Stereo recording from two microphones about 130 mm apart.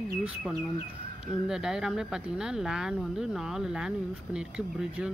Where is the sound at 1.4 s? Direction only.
5° right (ahead or behind).